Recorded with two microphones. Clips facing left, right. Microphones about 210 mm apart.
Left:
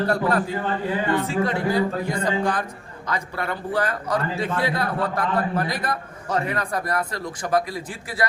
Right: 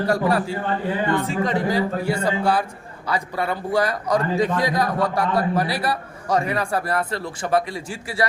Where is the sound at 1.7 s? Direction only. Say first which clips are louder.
Right 1 dB; 10° right (ahead or behind).